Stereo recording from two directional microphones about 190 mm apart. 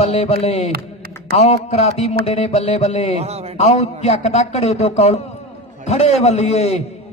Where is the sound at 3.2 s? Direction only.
35° right (ahead or behind).